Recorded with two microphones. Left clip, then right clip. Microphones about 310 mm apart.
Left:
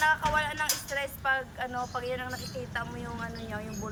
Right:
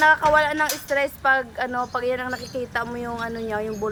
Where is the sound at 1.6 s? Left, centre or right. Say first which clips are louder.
Right 9 dB; centre.